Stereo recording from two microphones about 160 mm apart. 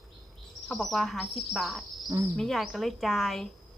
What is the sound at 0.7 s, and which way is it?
A woman's voice, centre (ahead or behind).